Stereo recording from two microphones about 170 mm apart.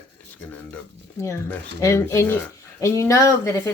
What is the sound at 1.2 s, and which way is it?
Speech, 15° left (ahead or behind).